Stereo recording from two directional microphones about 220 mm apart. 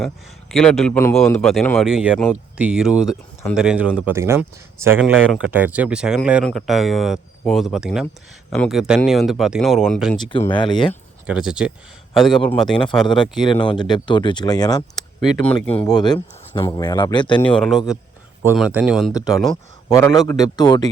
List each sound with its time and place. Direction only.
0.0 s speech: centre (ahead or behind)
10.2 s speech: 20° left (ahead or behind)
11.3 s speech: 5° right (ahead or behind)
13.4 s speech: 20° left (ahead or behind)
15.4 s speech: 5° left (ahead or behind)
16.0 s speech: 20° left (ahead or behind)
17.4 s speech: 5° left (ahead or behind)
19.9 s speech: 15° left (ahead or behind)